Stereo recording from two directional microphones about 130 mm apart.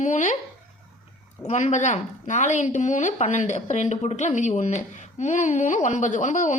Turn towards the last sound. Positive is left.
turn(degrees=70)  # may be behind; listen again after turning